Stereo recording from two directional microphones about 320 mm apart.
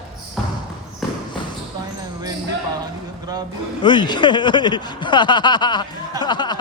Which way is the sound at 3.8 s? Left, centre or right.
Centre.